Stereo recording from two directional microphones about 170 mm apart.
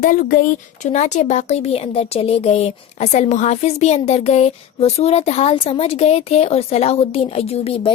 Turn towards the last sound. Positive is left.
turn(degrees=35)  # may be behind; listen again after turning